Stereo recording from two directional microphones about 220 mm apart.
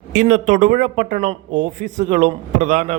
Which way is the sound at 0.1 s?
35° right (ahead or behind).